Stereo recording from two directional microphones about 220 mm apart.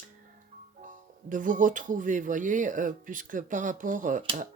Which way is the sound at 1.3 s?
35° right (ahead or behind).